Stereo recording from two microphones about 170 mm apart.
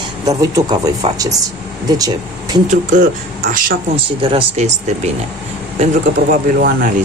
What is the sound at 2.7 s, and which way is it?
Speech, 45° right (ahead or behind).